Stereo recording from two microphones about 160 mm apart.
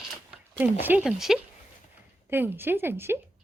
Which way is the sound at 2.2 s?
15° right (ahead or behind).